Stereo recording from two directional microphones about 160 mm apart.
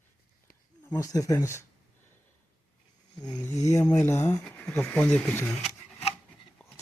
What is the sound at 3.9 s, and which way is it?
Speech, 15° left (ahead or behind).